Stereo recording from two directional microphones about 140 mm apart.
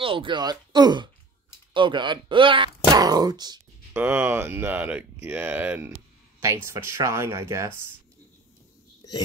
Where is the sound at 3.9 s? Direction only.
15° right (ahead or behind).